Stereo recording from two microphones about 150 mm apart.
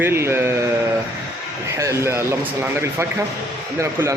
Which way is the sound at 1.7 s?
20° right (ahead or behind).